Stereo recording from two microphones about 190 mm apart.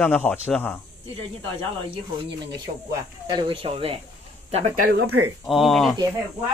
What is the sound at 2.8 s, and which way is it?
Speech, 25° right (ahead or behind).